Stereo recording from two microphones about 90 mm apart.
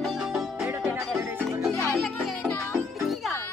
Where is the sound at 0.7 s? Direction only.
20° right (ahead or behind).